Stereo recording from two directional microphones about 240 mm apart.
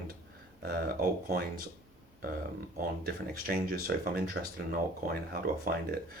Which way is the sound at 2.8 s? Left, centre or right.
Right.